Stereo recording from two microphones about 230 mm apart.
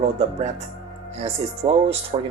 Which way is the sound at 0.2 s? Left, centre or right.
Right.